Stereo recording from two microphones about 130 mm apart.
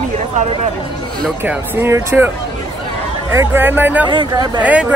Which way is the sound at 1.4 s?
15° right (ahead or behind).